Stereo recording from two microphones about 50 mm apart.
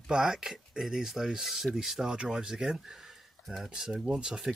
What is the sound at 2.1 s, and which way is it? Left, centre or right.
Speech, centre.